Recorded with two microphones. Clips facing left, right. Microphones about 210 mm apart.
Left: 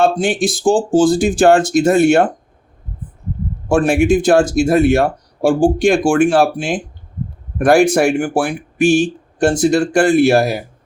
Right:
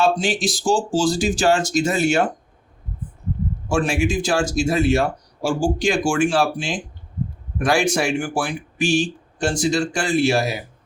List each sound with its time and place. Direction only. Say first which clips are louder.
0.0 s speech: left 5 dB; 55° left (ahead or behind)
3.7 s speech: left 8 dB; 60° left (ahead or behind)